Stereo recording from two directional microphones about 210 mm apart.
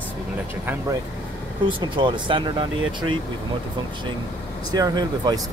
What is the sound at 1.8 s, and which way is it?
Speech, 20° right (ahead or behind).